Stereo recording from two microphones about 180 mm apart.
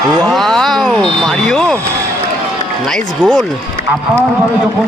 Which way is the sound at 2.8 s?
5° left (ahead or behind).